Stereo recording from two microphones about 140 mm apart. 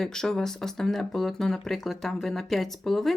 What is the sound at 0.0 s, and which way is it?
Speech, 5° left (ahead or behind).